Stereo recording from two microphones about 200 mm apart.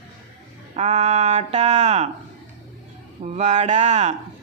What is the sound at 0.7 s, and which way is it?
Speech, 35° right (ahead or behind).